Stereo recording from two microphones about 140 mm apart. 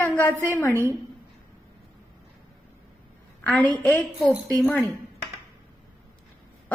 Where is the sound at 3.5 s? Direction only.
10° left (ahead or behind).